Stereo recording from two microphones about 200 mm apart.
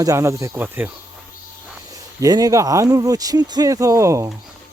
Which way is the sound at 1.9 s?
15° right (ahead or behind).